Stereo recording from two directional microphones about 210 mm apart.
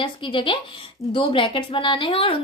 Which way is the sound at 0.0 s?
25° left (ahead or behind).